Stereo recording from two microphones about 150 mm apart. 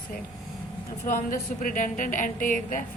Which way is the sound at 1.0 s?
65° left (ahead or behind).